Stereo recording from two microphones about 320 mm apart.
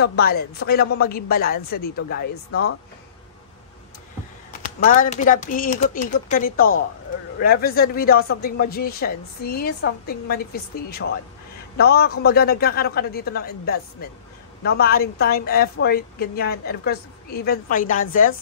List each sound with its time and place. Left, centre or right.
0.0 s a woman's voice: left
4.5 s a woman's voice: left